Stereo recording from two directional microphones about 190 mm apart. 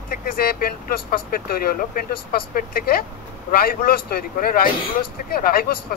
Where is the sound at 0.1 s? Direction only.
50° left (ahead or behind).